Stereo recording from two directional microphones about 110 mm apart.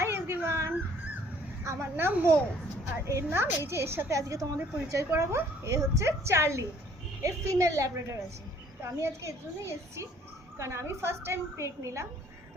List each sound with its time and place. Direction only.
0.0 s a sound: 20° right (ahead or behind)
1.6 s a child's voice: 20° right (ahead or behind)
10.6 s a woman's voice: 25° right (ahead or behind)